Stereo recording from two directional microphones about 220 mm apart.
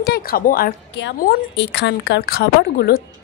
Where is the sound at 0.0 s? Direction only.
45° left (ahead or behind).